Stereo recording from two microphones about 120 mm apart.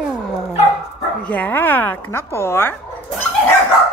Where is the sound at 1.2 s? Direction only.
15° left (ahead or behind).